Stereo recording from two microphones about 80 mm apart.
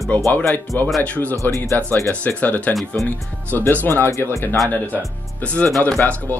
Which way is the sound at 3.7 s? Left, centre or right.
Left.